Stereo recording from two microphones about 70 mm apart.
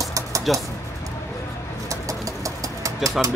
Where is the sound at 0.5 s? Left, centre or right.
Centre.